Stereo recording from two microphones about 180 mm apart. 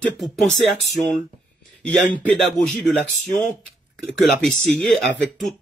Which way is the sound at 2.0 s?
45° left (ahead or behind).